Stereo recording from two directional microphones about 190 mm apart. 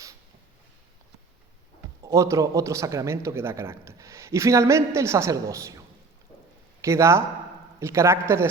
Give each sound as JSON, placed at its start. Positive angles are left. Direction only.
{"t": 2.0, "sound": "a man's voice", "side_deg": -15}
{"t": 6.8, "sound": "a man's voice", "side_deg": -15}